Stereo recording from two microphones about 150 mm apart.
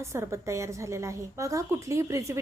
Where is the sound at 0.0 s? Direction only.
20° right (ahead or behind).